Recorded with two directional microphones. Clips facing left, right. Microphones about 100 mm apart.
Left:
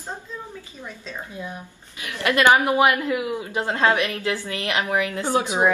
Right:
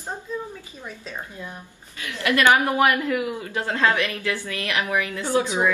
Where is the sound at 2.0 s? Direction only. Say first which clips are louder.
Left 1 dB; 20° left (ahead or behind).